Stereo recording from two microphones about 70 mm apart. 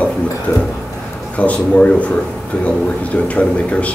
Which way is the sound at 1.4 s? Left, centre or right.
Centre.